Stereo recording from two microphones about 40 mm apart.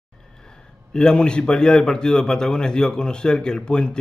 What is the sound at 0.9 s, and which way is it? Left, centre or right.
A man's voice, left.